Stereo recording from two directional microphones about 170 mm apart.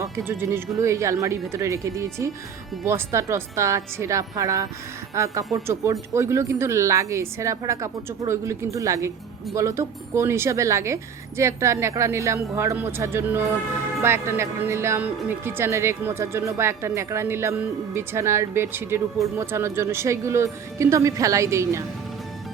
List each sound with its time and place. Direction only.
0.0 s speech: 15° right (ahead or behind)